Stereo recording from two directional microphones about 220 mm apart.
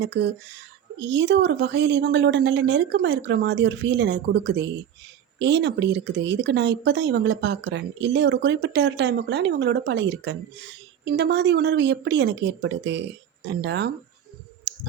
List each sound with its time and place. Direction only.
0.0 s speech: 45° right (ahead or behind)
14.7 s clicking: 50° right (ahead or behind)